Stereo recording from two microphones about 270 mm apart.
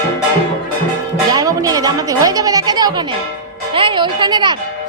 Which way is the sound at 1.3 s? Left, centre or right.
Centre.